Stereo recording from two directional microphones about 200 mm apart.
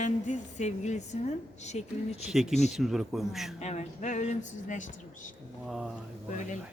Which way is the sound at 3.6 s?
35° left (ahead or behind).